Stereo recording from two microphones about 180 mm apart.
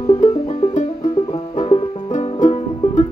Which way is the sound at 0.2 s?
45° left (ahead or behind).